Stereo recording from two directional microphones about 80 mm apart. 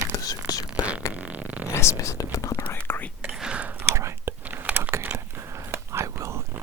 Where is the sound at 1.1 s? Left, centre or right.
Left.